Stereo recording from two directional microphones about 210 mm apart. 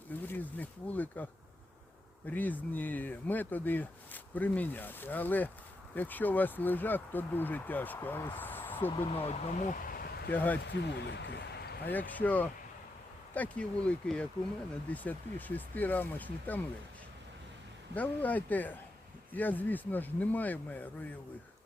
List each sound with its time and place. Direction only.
0.1 s speech: 10° left (ahead or behind)
9.0 s speech: 30° left (ahead or behind); by 10.3 s 50° left (ahead or behind)
10.3 s speech: 10° left (ahead or behind)
10.7 s speech: 55° left (ahead or behind)
11.9 s speech: 10° left (ahead or behind)
17.9 s speech: 5° left (ahead or behind)